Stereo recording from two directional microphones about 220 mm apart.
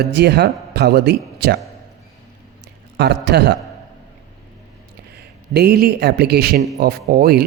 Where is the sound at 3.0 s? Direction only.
50° right (ahead or behind).